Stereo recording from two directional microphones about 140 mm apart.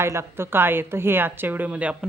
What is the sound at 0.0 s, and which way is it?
A woman's voice, 20° right (ahead or behind).